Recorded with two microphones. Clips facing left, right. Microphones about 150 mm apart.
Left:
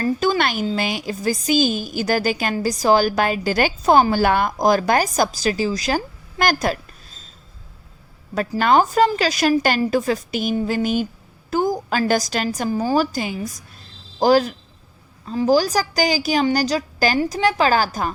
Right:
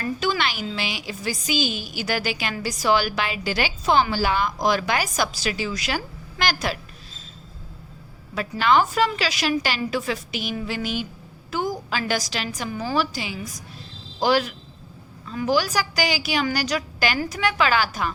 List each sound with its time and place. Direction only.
0.0 s a woman's voice: 40° left (ahead or behind)
6.4 s a woman's voice: 45° left (ahead or behind)
8.4 s a woman's voice: 45° left (ahead or behind)